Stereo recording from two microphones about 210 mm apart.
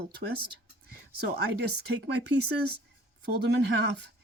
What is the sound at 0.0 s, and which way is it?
Speech, 50° right (ahead or behind).